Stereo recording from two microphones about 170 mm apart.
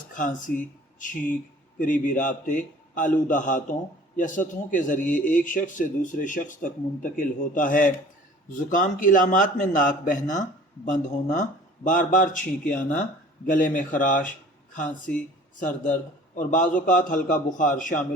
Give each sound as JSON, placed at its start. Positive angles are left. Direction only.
{"t": 0.1, "sound": "a man's voice", "side_deg": 50}
{"t": 16.3, "sound": "a man's voice", "side_deg": 50}